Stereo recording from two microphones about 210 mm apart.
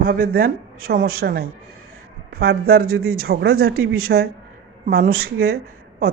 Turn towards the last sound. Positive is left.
turn(degrees=-50)  # may be behind; listen again after turning